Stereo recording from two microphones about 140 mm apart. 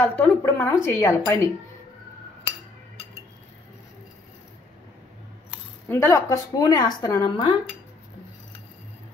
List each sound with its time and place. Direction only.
0.1 s a woman's voice: 10° left (ahead or behind)
5.9 s speech: 20° left (ahead or behind)